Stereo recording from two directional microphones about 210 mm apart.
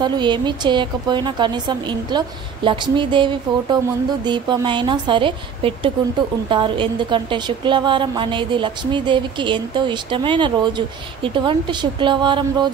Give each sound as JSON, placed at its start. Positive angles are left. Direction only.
{"t": 0.0, "sound": "a woman's voice", "side_deg": -20}